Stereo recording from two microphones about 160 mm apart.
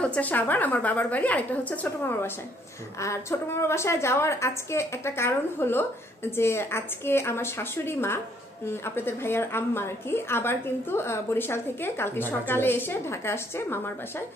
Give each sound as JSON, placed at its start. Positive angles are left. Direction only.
{"t": 0.0, "sound": "a woman's voice", "side_deg": 10}